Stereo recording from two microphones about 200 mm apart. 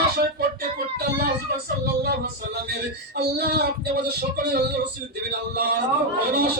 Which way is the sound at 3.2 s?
50° right (ahead or behind).